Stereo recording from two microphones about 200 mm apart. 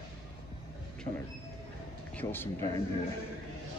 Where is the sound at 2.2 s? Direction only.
10° left (ahead or behind).